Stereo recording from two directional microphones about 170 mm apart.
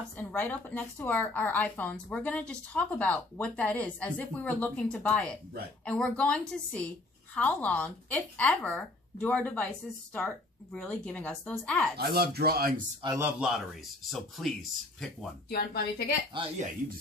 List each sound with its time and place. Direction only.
0.2 s a woman's voice: 10° left (ahead or behind)
12.0 s speech: 65° right (ahead or behind)
13.2 s speech: 5° right (ahead or behind)
15.5 s a woman's voice: 65° left (ahead or behind)